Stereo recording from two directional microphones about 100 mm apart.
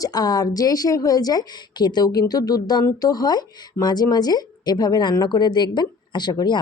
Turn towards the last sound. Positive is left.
turn(degrees=45)  # may be behind; listen again after turning